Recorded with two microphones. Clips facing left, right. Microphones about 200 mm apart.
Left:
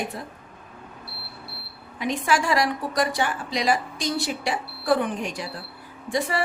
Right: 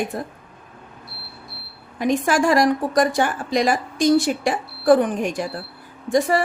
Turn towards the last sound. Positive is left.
turn(degrees=-45)  # may be behind; listen again after turning